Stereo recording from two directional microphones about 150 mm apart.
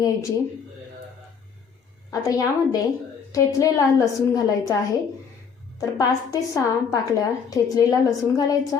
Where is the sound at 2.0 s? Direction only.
20° left (ahead or behind).